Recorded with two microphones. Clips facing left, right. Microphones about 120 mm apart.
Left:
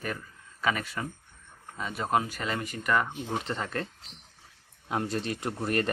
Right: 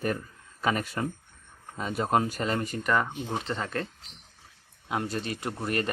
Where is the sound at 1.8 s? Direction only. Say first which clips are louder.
Right 2 dB; 35° right (ahead or behind).